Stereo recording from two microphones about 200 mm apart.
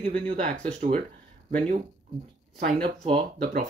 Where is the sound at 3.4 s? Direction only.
45° right (ahead or behind).